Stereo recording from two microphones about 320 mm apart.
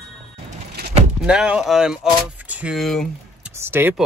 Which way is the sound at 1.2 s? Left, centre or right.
Centre.